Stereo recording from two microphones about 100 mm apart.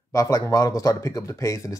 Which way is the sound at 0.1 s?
35° left (ahead or behind).